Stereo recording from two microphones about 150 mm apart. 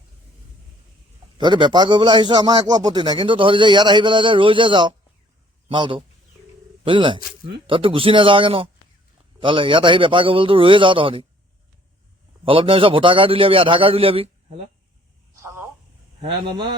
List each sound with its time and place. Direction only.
1.4 s a man's voice: 30° right (ahead or behind)
12.5 s a man's voice: 35° right (ahead or behind)
15.4 s telephone: 20° right (ahead or behind)